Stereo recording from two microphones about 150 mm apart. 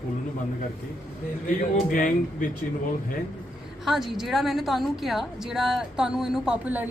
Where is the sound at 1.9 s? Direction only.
65° left (ahead or behind).